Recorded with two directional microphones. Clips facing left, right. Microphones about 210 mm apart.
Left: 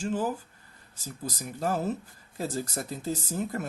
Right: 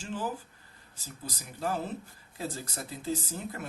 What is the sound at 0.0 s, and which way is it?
Speech, 45° left (ahead or behind).